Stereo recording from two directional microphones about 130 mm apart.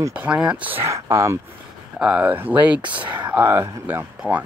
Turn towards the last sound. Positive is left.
turn(degrees=-15)  # may be behind; listen again after turning